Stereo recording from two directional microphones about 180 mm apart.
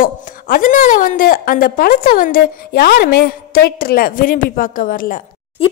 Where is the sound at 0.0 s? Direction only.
50° left (ahead or behind).